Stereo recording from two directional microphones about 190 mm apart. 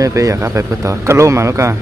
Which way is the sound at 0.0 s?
15° right (ahead or behind).